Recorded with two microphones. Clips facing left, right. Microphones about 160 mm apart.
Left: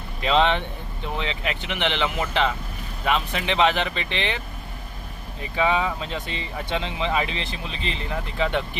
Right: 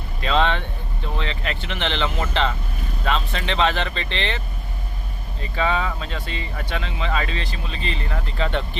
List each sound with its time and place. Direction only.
0.2 s speech: 15° left (ahead or behind)
5.4 s speech: 15° left (ahead or behind)